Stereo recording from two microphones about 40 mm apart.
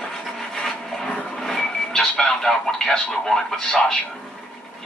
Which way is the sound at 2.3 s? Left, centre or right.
Centre.